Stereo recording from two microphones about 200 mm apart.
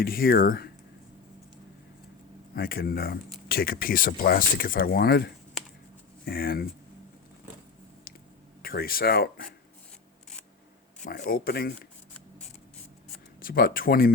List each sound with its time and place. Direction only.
0.0 s speech: 45° left (ahead or behind)
2.6 s speech: 45° left (ahead or behind)
8.6 s speech: 45° left (ahead or behind)
11.0 s speech: 40° left (ahead or behind)
13.4 s speech: 45° left (ahead or behind)